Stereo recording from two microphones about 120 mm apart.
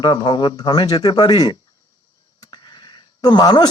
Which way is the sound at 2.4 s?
40° left (ahead or behind).